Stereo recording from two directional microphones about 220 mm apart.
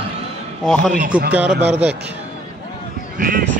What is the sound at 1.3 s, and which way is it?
Speech, 5° right (ahead or behind).